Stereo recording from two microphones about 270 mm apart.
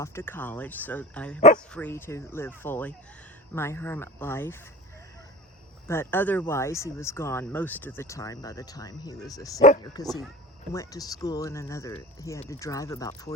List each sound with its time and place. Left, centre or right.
0.0 s speech: centre
5.9 s speech: centre
9.6 s speech: left
9.8 s speech: centre